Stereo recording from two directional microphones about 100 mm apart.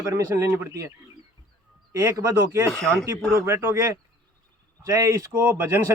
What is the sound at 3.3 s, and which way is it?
A man's voice, 25° right (ahead or behind).